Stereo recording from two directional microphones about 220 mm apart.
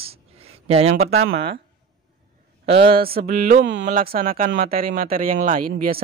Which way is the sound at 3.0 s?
45° right (ahead or behind).